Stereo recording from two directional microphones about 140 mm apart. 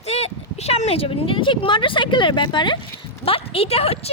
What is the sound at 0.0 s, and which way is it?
Speech, 50° left (ahead or behind).